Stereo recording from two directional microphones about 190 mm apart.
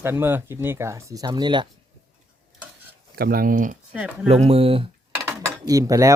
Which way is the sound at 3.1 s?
50° right (ahead or behind).